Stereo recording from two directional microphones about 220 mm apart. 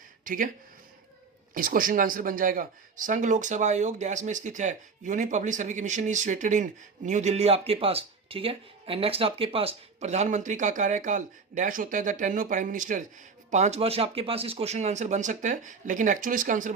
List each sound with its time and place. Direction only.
0.3 s speech: 40° right (ahead or behind)
1.5 s speech: 40° right (ahead or behind)